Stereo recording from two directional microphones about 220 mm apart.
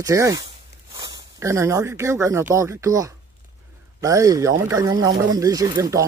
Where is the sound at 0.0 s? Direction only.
15° right (ahead or behind).